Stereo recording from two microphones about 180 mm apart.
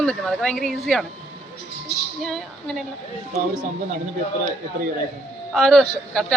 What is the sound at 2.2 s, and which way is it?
Speech, centre (ahead or behind).